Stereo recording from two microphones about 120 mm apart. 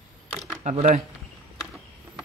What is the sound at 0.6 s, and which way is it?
Speech, 70° right (ahead or behind).